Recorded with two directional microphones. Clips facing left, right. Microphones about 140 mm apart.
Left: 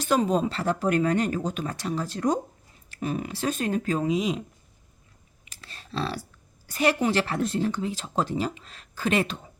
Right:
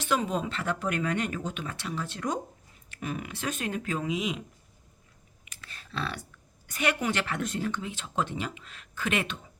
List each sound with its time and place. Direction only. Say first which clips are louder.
0.0 s speech: left 6 dB; 40° left (ahead or behind)
5.5 s typing: left 4 dB; 30° left (ahead or behind)
6.7 s speech: left 5 dB; 35° left (ahead or behind)